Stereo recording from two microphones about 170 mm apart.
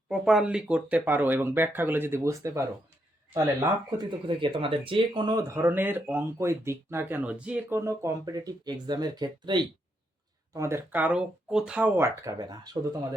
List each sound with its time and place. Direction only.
0.1 s speech: 5° right (ahead or behind); by 12.7 s 25° right (ahead or behind)